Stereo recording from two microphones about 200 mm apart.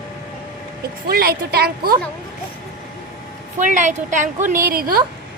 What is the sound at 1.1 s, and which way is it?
Speech, 50° right (ahead or behind).